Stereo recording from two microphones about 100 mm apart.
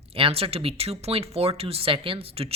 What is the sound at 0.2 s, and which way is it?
Speech, 75° right (ahead or behind).